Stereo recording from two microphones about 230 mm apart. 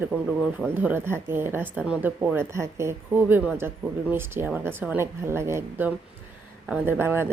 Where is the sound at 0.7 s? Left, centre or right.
Centre.